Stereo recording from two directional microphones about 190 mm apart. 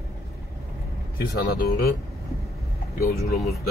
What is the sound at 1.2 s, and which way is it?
Speech, 55° left (ahead or behind).